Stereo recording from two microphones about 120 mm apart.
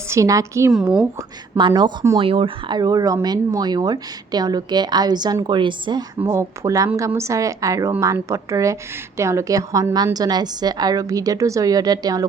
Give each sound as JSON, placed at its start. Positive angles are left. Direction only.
{"t": 0.1, "sound": "speech", "side_deg": -25}
{"t": 1.5, "sound": "speech", "side_deg": -40}
{"t": 6.2, "sound": "speech", "side_deg": -25}